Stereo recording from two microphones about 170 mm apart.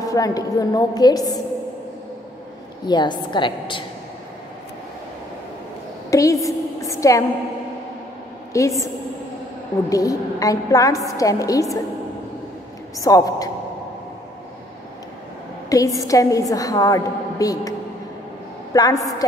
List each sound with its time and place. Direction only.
0.1 s a woman's voice: 20° left (ahead or behind)
2.9 s a woman's voice: 25° left (ahead or behind)
6.0 s a sound: 20° left (ahead or behind)
8.5 s a woman's voice: 20° left (ahead or behind)
9.8 s a woman's voice: 20° left (ahead or behind)
12.9 s a woman's voice: 20° left (ahead or behind)
15.7 s a woman's voice: 20° left (ahead or behind)